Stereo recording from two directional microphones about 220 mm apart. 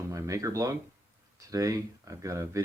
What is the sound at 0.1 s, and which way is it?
Speech, 15° right (ahead or behind).